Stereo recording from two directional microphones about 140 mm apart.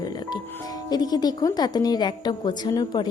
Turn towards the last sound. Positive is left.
turn(degrees=30)  # may be behind; listen again after turning